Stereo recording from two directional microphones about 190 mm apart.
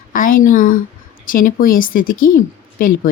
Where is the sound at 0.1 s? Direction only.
45° left (ahead or behind).